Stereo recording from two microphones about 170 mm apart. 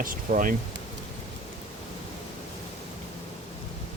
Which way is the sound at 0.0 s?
55° right (ahead or behind).